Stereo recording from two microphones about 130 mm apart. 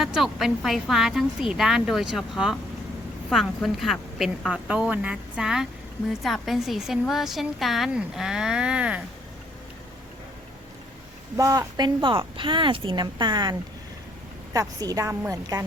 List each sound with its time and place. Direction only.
0.0 s a woman's voice: centre (ahead or behind)
11.3 s a woman's voice: 25° right (ahead or behind)
12.0 s a woman's voice: 40° right (ahead or behind)